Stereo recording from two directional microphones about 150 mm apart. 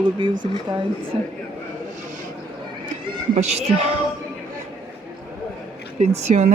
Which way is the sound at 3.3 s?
45° right (ahead or behind).